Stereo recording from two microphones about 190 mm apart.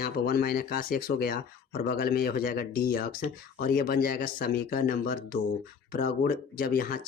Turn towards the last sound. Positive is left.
turn(degrees=50)  # may be behind; listen again after turning